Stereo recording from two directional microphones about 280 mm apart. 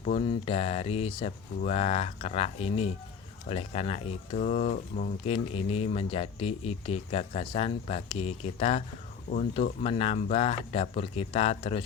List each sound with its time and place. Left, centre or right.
0.0 s speech: left